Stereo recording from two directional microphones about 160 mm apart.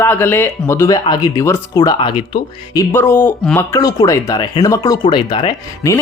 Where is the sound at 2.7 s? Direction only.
20° left (ahead or behind).